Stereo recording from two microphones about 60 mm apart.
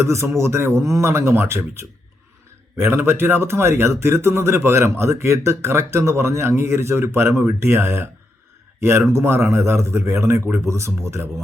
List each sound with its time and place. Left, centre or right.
0.0 s speech: right